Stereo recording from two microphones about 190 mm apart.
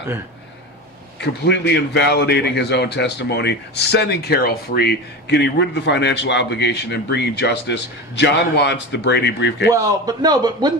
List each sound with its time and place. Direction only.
1.2 s a man's voice: 65° left (ahead or behind)
9.7 s a man's voice: 20° right (ahead or behind)